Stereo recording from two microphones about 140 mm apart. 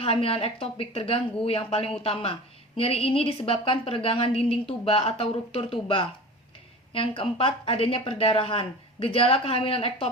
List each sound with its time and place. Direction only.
0.0 s a woman's voice: 45° left (ahead or behind)